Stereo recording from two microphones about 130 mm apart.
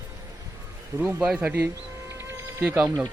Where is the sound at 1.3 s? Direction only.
15° right (ahead or behind).